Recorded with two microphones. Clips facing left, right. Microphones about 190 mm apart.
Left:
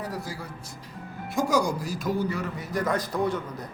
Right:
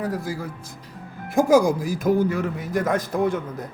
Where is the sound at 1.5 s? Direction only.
50° right (ahead or behind).